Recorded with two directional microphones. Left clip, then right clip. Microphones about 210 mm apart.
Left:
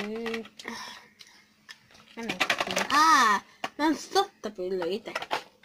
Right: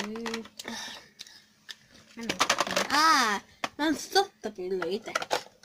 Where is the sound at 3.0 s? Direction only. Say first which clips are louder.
Left 3 dB; 10° right (ahead or behind).